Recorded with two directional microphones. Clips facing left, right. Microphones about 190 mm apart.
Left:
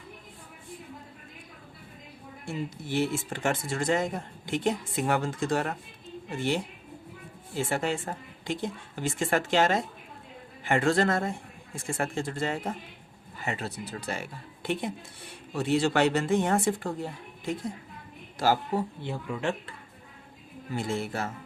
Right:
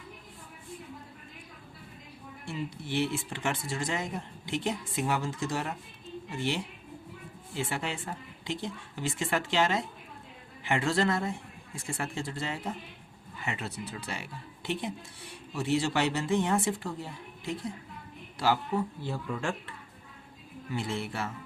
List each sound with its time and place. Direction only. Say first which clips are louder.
2.5 s speech: left 2 dB; 45° left (ahead or behind)
13.4 s a woman's voice: left 3 dB; 40° left (ahead or behind)
19.0 s speech: left 2 dB; 20° left (ahead or behind)
20.7 s speech: left 3 dB; 45° left (ahead or behind)